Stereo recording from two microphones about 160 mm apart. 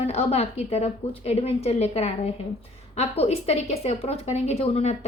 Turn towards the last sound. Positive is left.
turn(degrees=40)  # may be behind; listen again after turning